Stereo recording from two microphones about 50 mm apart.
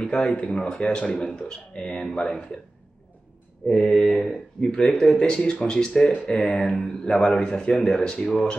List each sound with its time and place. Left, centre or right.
0.0 s speech: left
3.6 s speech: centre